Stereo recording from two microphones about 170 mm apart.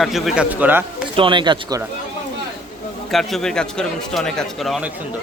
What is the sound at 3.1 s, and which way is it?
A man's voice, centre (ahead or behind).